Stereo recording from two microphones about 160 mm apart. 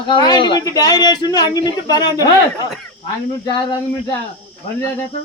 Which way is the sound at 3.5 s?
30° left (ahead or behind).